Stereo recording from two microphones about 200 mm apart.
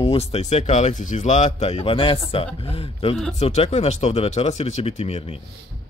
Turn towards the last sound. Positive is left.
turn(degrees=30)  # may be behind; listen again after turning